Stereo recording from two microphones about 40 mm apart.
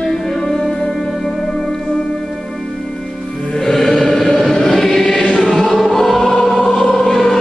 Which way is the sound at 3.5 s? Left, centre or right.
Centre.